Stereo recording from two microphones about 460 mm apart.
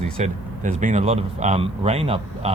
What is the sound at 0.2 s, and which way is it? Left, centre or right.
Speech, centre.